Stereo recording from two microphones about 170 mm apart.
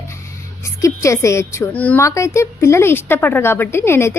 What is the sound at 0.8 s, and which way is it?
A woman's voice, 15° left (ahead or behind).